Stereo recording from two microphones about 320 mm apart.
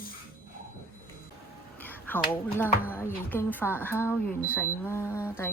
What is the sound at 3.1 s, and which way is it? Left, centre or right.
Speech, centre.